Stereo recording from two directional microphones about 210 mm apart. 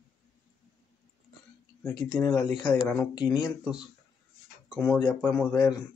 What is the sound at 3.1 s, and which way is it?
Speech, 20° left (ahead or behind).